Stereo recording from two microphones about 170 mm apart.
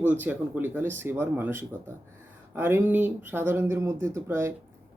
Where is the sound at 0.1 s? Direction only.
10° right (ahead or behind).